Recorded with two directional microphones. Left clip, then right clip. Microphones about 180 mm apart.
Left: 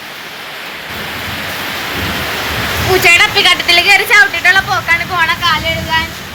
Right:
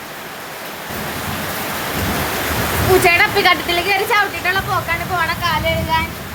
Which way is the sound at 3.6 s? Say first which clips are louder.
Left 8 dB; 10° right (ahead or behind).